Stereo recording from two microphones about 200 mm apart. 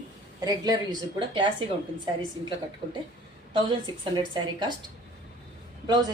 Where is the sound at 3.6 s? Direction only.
25° right (ahead or behind).